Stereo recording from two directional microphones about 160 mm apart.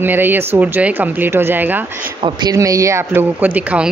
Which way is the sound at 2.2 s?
25° right (ahead or behind).